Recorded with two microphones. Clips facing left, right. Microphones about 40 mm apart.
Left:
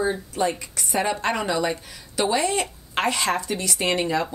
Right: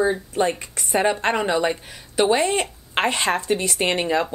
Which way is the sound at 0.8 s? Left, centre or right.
Right.